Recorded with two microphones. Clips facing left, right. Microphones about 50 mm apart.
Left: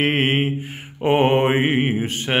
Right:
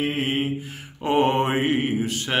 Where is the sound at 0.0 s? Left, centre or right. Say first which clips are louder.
Left 5 dB; left.